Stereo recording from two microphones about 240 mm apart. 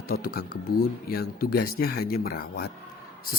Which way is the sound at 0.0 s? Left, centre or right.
Left.